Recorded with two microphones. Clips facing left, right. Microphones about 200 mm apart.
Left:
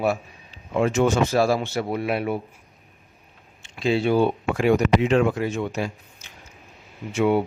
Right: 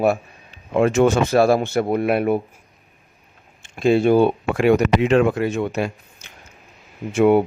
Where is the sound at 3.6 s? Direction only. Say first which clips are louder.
Right 6 dB; 50° right (ahead or behind).